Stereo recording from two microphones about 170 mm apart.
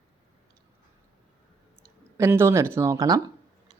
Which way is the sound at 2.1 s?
15° right (ahead or behind).